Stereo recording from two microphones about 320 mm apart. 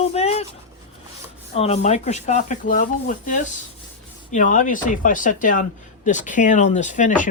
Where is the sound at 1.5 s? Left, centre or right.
Centre.